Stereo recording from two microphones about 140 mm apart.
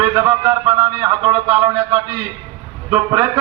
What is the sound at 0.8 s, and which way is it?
A man's voice, 10° right (ahead or behind).